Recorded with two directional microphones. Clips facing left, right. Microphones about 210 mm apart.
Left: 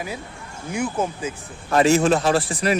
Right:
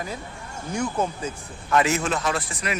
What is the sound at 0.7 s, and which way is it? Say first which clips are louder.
Speech: left 2 dB; 5° left (ahead or behind).